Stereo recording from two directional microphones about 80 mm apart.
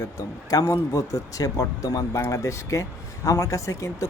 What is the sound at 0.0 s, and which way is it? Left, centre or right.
Speech, left.